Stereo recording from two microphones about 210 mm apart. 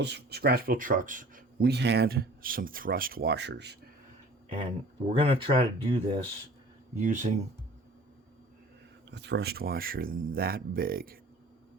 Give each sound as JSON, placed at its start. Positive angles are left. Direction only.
{"t": 0.0, "sound": "speech", "side_deg": -50}
{"t": 5.0, "sound": "speech", "side_deg": -25}
{"t": 9.0, "sound": "speech", "side_deg": -55}